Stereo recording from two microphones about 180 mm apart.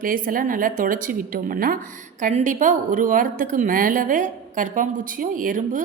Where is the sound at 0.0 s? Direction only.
50° right (ahead or behind).